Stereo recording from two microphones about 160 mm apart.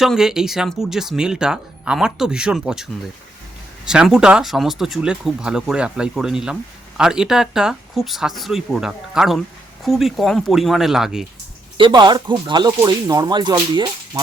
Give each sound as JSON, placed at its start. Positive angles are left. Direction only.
{"t": 0.0, "sound": "speech", "side_deg": 0}
{"t": 11.8, "sound": "speech", "side_deg": -30}